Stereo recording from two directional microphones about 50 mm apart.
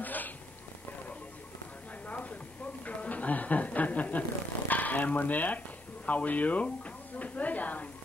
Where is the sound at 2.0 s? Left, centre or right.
Left.